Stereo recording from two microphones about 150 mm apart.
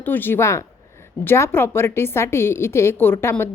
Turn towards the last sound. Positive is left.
turn(degrees=15)  # may be behind; listen again after turning